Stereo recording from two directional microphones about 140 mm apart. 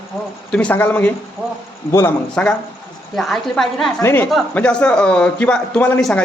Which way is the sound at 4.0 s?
15° left (ahead or behind).